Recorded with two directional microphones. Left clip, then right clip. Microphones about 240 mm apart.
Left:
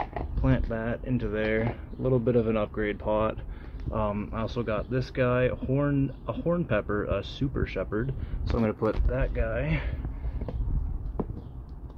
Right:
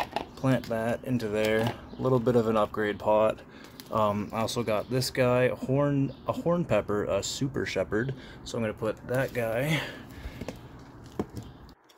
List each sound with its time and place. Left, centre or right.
0.4 s speech: centre
8.5 s speech: centre
9.1 s speech: right